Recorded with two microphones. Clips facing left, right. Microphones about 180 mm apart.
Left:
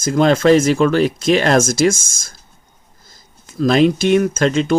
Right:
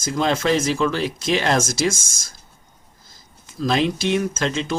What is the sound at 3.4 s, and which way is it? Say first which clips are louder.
Speech: left 7 dB; 55° left (ahead or behind).